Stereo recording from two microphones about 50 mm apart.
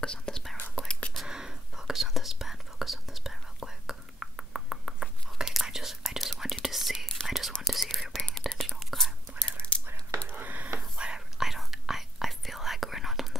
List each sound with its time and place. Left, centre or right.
0.0 s whispering: centre
1.1 s whispering: centre
9.8 s whispering: right
11.0 s whispering: centre